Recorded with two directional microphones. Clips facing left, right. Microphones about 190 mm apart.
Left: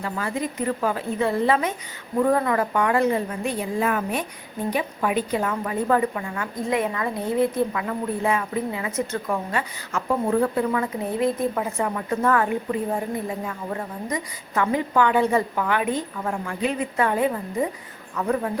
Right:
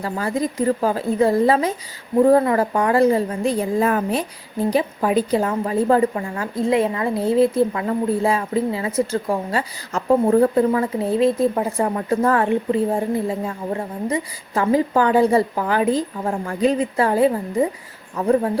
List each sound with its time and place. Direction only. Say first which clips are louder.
0.0 s a woman's voice: right 5 dB; 35° right (ahead or behind)